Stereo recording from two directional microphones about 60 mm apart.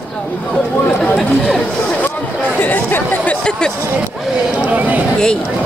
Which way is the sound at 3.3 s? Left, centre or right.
Centre.